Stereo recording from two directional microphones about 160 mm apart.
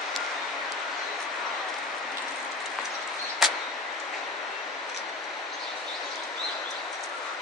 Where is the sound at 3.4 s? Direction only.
Centre (ahead or behind).